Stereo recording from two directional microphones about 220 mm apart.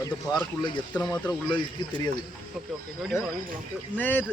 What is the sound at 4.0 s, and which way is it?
Speech, 10° left (ahead or behind).